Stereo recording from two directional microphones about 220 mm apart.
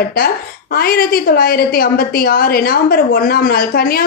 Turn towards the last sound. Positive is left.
turn(degrees=40)  # may be behind; listen again after turning